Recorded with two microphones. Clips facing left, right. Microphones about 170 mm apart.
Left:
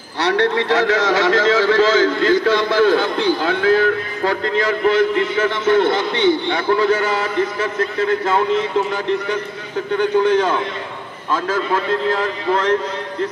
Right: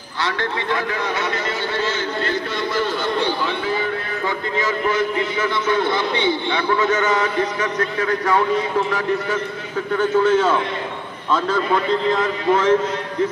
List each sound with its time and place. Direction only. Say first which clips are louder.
0.2 s a man's voice: left 7 dB; 70° left (ahead or behind)
5.7 s a man's voice: left 6 dB; 45° left (ahead or behind); by 8.4 s 30° left (ahead or behind)
9.9 s a man's voice: left 1 dB; 15° left (ahead or behind)